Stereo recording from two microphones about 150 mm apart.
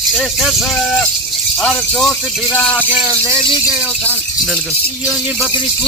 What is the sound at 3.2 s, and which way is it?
Speech, 20° right (ahead or behind).